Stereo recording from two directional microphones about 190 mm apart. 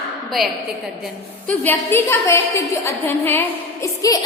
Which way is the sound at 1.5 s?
10° left (ahead or behind).